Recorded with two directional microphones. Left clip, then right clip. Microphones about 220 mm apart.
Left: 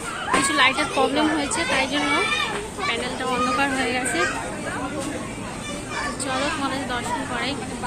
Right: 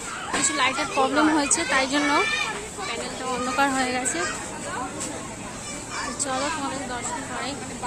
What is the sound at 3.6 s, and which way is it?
Speech, 20° right (ahead or behind).